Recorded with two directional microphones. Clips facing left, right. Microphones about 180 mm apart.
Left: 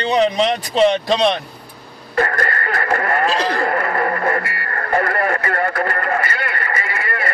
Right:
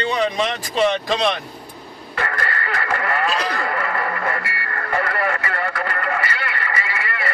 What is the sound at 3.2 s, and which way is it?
Music, 30° left (ahead or behind).